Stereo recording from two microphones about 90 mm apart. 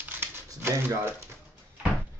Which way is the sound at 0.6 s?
25° right (ahead or behind).